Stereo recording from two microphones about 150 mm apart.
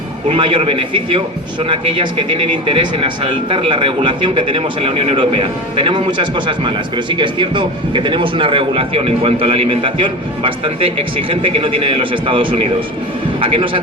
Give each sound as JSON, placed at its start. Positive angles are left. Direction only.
{"t": 0.3, "sound": "a man's voice", "side_deg": -35}